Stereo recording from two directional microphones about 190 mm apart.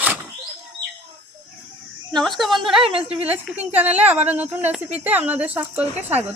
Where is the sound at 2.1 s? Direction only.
Centre (ahead or behind).